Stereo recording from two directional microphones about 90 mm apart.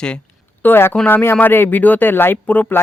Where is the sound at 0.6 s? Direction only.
25° left (ahead or behind).